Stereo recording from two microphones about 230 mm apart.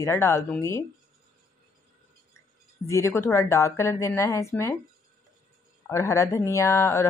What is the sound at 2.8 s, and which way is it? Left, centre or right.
Speech, centre.